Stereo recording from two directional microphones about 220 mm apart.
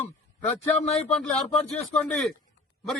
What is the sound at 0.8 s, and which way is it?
Speech, 30° left (ahead or behind).